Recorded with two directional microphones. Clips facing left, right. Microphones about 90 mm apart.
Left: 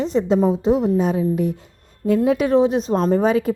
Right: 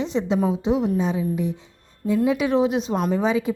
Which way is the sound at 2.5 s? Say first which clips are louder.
Left 4 dB; 35° left (ahead or behind).